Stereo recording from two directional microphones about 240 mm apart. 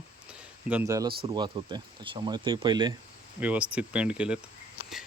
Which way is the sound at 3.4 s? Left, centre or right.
Centre.